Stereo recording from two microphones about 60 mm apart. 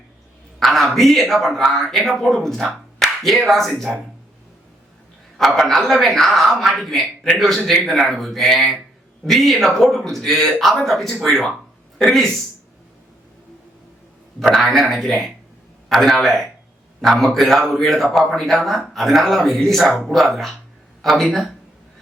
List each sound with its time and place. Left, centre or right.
0.6 s a woman's voice: centre
5.4 s a man's voice: centre
14.5 s a man's voice: centre